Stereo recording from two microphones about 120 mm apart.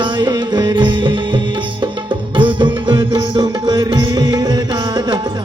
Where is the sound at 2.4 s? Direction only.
45° right (ahead or behind).